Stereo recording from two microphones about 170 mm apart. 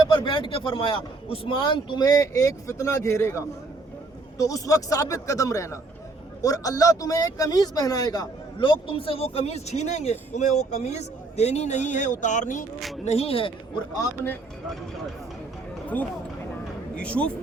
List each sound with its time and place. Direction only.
0.0 s a man's voice: 25° left (ahead or behind); by 12.6 s 45° left (ahead or behind)
13.1 s speech: 35° left (ahead or behind)
16.9 s speech: 5° left (ahead or behind)